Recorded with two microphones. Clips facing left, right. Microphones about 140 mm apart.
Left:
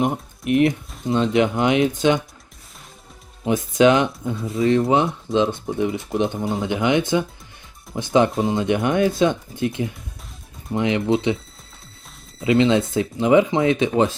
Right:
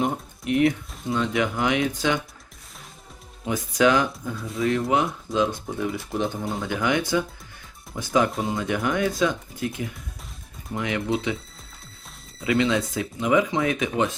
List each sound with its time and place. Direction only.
1.0 s speech: 25° left (ahead or behind)
3.4 s speech: 25° left (ahead or behind)
12.4 s speech: 25° left (ahead or behind)